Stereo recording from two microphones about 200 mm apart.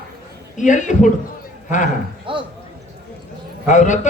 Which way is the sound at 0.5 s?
40° left (ahead or behind).